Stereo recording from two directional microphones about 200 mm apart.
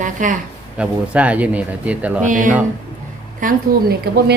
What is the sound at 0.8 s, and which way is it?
Speech, 5° right (ahead or behind).